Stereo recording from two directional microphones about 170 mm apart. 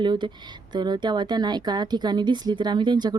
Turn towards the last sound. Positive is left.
turn(degrees=-25)  # may be behind; listen again after turning